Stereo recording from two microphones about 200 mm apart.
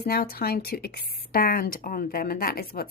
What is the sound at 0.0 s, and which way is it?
A woman's voice, 50° left (ahead or behind).